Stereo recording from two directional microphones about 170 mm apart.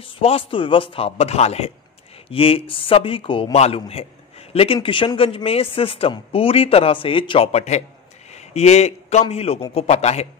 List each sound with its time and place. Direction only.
0.0 s a man's voice: 35° left (ahead or behind)